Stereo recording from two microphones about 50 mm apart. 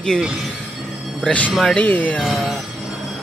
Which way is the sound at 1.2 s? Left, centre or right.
Left.